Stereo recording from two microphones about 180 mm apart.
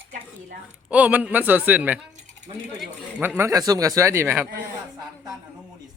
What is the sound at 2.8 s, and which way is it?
Speech, 10° right (ahead or behind).